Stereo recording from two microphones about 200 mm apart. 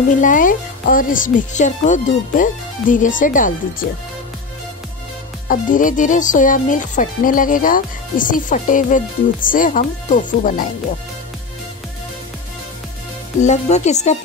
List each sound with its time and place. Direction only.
0.2 s speech: 40° left (ahead or behind)
5.5 s speech: 40° left (ahead or behind)
13.4 s speech: 35° left (ahead or behind)